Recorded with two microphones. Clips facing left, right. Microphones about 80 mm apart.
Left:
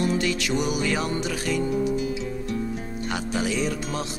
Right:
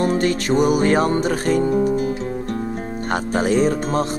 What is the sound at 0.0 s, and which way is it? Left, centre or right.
Music, right.